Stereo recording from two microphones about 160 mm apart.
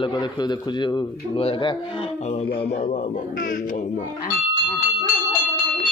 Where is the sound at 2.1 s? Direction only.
45° left (ahead or behind).